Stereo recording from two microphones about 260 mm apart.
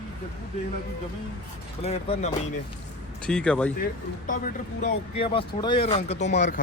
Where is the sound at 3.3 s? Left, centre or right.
Centre.